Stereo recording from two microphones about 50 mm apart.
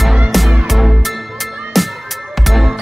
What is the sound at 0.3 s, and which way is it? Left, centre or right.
Music, centre.